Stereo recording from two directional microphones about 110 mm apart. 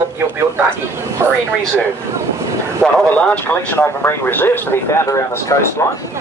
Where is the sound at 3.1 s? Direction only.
15° left (ahead or behind).